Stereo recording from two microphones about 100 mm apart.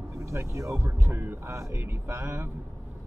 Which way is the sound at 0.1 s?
30° right (ahead or behind).